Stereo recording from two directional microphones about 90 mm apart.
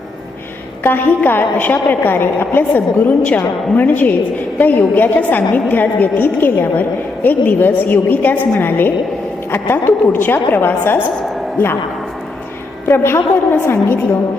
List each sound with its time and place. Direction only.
0.9 s a woman's voice: 20° left (ahead or behind)
12.9 s a woman's voice: 30° left (ahead or behind)